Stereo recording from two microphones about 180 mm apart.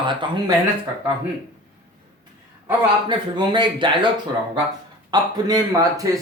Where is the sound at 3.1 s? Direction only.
25° right (ahead or behind).